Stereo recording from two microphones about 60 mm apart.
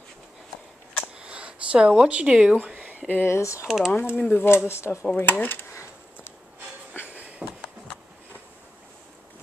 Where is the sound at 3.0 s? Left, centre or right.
Left.